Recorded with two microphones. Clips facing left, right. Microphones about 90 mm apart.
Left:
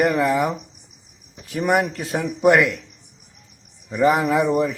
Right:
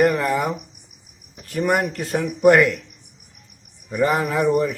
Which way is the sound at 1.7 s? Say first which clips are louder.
Left 1 dB; centre (ahead or behind).